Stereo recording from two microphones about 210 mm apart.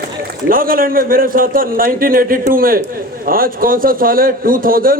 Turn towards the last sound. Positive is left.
turn(degrees=-40)  # may be behind; listen again after turning